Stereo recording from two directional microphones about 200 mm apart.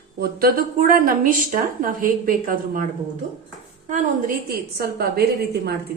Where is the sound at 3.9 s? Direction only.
40° right (ahead or behind).